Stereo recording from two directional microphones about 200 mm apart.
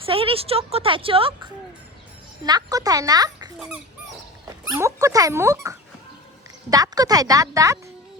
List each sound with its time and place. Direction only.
0.0 s a woman's voice: 25° right (ahead or behind)
2.4 s a woman's voice: 20° right (ahead or behind)
4.7 s speech: 15° right (ahead or behind)